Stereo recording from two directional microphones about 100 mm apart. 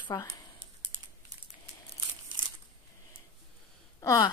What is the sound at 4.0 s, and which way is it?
Speech, 30° left (ahead or behind).